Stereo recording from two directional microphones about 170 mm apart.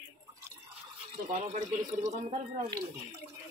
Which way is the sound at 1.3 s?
45° right (ahead or behind).